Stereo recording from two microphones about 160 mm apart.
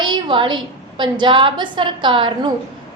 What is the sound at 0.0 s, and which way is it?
A woman's voice, 30° right (ahead or behind).